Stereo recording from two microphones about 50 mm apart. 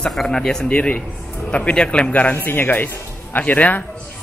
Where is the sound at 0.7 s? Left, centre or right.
Left.